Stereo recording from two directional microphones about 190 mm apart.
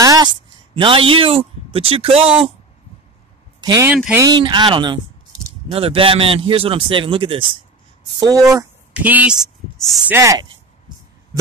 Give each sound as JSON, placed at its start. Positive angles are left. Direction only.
{"t": 0.0, "sound": "a sound", "side_deg": -20}
{"t": 0.7, "sound": "a man's voice", "side_deg": -25}
{"t": 3.6, "sound": "a man's voice", "side_deg": -20}
{"t": 3.9, "sound": "speech", "side_deg": -5}
{"t": 4.2, "sound": "a man's voice", "side_deg": -25}
{"t": 10.1, "sound": "speech", "side_deg": -15}